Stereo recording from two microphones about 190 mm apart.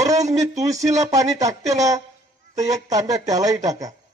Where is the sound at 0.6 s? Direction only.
20° right (ahead or behind).